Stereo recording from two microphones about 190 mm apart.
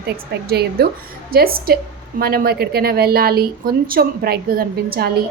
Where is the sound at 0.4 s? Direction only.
55° right (ahead or behind).